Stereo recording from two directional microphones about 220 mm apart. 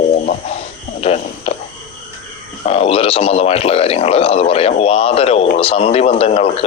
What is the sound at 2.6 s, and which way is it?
Speech, 25° left (ahead or behind).